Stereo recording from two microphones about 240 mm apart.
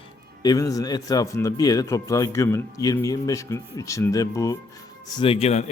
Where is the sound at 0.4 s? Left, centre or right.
Centre.